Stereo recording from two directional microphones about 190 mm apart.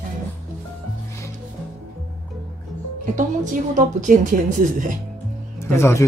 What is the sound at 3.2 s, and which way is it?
A woman's voice, 40° right (ahead or behind).